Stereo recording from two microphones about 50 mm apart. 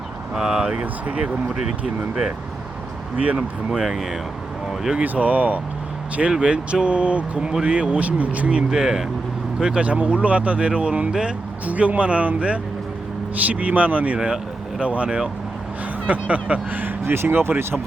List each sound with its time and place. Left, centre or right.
0.3 s speech: centre
0.7 s speech: right
3.2 s speech: right
3.7 s speech: centre
5.0 s speech: right
6.3 s speech: right
8.7 s speech: centre
11.6 s speech: right